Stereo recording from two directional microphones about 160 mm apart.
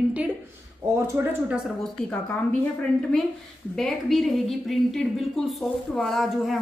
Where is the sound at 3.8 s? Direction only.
Centre (ahead or behind).